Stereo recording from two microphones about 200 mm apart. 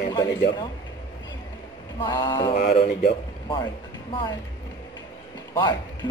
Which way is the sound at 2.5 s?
35° left (ahead or behind).